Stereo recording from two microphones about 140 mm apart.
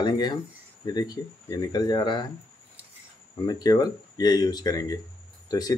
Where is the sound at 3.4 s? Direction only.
30° left (ahead or behind).